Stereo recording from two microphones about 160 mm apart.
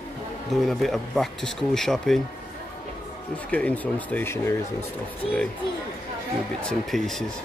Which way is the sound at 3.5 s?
10° left (ahead or behind).